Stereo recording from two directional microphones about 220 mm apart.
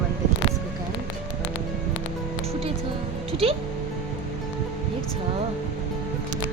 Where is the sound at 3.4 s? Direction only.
25° right (ahead or behind).